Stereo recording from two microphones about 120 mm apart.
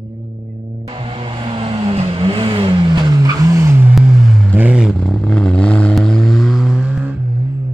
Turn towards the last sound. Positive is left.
turn(degrees=-10)  # may be behind; listen again after turning